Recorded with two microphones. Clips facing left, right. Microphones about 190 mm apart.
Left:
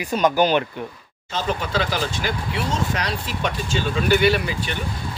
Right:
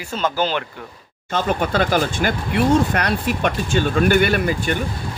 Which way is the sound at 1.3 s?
55° right (ahead or behind).